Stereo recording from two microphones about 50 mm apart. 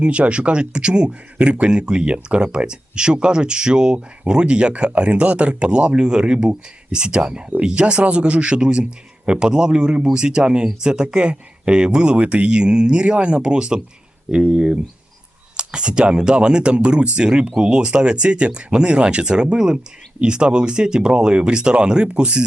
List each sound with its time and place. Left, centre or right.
0.0 s speech: right